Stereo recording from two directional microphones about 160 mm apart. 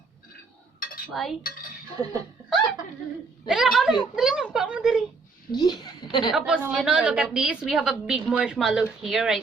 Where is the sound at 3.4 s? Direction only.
Centre (ahead or behind).